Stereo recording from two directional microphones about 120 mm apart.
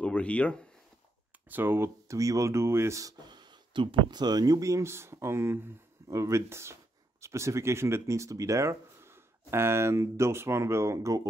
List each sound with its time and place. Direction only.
0.0 s speech: 10° left (ahead or behind)
1.5 s speech: 20° right (ahead or behind)